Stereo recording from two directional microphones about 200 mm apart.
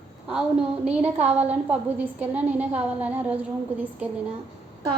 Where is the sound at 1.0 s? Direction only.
5° right (ahead or behind).